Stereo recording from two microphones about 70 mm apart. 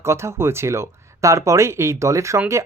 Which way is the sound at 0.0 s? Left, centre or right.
Right.